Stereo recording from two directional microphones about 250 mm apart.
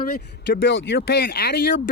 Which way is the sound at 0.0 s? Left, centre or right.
Left.